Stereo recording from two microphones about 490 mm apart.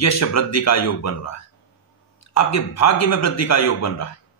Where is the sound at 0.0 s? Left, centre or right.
Left.